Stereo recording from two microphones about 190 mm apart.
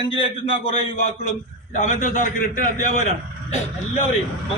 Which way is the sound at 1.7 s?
40° left (ahead or behind).